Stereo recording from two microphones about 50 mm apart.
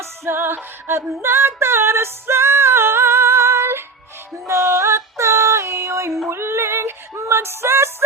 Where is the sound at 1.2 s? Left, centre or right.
Right.